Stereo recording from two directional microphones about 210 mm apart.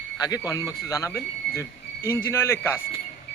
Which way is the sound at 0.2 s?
15° left (ahead or behind).